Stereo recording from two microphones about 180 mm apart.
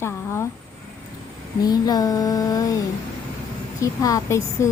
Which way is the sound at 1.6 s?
20° left (ahead or behind).